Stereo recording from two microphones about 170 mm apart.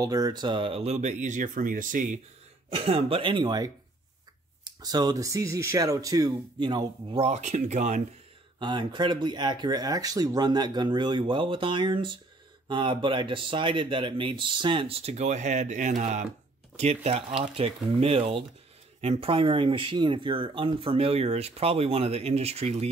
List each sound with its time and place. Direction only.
0.0 s speech: 20° right (ahead or behind); by 2.1 s 50° right (ahead or behind)
2.7 s speech: 35° right (ahead or behind)
7.2 s speech: 40° right (ahead or behind)
8.5 s speech: 25° right (ahead or behind)